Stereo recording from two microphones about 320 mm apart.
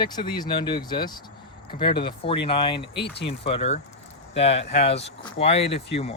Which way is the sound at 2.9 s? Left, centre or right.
Left.